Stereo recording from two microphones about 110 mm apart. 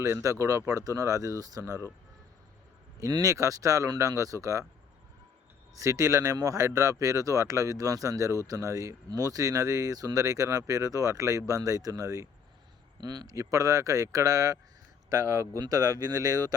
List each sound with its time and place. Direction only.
0.0 s speech: 30° right (ahead or behind)
3.0 s speech: 30° right (ahead or behind)
5.7 s speech: 30° right (ahead or behind)